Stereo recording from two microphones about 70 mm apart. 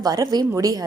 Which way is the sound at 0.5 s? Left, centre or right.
Right.